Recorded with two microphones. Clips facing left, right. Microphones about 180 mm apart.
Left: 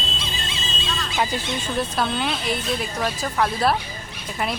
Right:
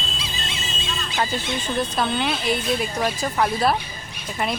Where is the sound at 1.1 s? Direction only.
10° left (ahead or behind).